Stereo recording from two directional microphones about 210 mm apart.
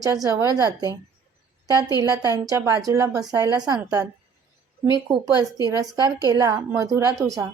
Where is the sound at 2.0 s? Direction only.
15° right (ahead or behind).